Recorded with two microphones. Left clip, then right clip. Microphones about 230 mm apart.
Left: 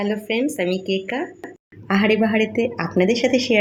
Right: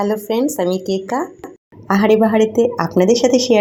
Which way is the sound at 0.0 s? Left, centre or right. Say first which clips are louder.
Right 5 dB; centre.